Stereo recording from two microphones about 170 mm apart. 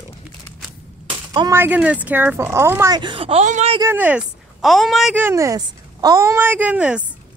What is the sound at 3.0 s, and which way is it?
Speech, 30° right (ahead or behind).